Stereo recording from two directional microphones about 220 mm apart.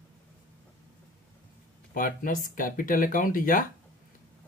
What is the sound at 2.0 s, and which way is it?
Speech, 40° left (ahead or behind).